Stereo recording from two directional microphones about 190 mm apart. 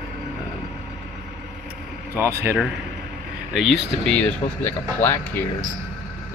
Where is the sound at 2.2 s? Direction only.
15° right (ahead or behind).